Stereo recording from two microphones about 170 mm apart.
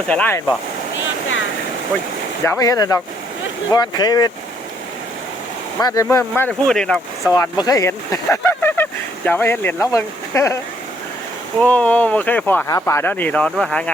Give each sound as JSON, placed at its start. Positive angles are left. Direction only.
{"t": 0.1, "sound": "speech", "side_deg": 10}
{"t": 2.4, "sound": "speech", "side_deg": 15}
{"t": 5.8, "sound": "speech", "side_deg": 20}
{"t": 7.3, "sound": "speech", "side_deg": 25}
{"t": 11.6, "sound": "speech", "side_deg": 10}